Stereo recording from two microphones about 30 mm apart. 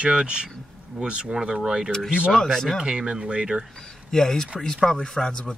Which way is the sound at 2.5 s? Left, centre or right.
Centre.